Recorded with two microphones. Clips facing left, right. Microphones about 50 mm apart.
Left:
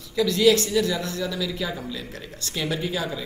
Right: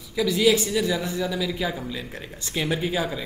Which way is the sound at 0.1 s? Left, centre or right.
Centre.